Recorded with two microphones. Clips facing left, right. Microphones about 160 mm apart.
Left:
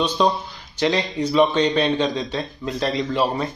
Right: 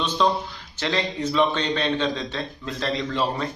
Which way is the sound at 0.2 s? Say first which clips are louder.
Left 2 dB; 15° left (ahead or behind).